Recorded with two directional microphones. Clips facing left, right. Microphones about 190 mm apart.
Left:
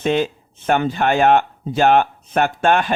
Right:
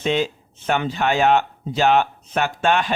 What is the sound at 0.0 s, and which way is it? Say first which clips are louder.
Speech: left 3 dB; 50° left (ahead or behind).